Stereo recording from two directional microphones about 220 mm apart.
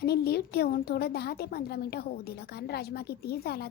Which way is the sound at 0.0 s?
45° left (ahead or behind).